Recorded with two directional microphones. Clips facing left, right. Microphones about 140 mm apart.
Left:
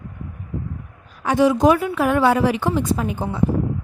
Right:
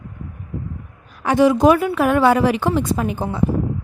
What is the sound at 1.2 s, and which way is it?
Speech, 65° right (ahead or behind).